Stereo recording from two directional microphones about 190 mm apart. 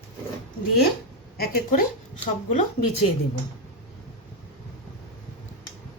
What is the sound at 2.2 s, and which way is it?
Speech, 35° left (ahead or behind).